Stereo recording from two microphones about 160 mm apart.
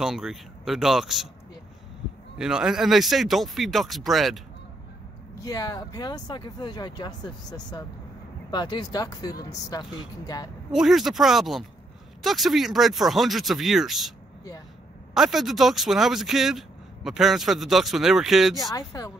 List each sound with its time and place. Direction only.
0.0 s speech: centre (ahead or behind)
2.3 s speech: 5° right (ahead or behind)
5.4 s speech: 25° left (ahead or behind)
10.7 s speech: centre (ahead or behind)
15.1 s speech: centre (ahead or behind)
18.6 s speech: 20° left (ahead or behind)